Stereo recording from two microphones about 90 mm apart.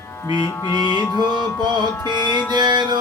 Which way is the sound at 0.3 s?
60° left (ahead or behind).